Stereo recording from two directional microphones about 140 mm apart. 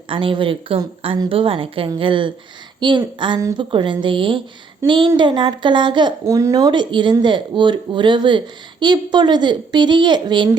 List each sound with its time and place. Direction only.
0.1 s speech: 40° right (ahead or behind)
6.2 s speech: 25° right (ahead or behind)